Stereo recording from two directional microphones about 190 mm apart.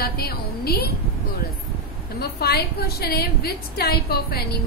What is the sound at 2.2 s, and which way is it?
A woman's voice, 55° left (ahead or behind).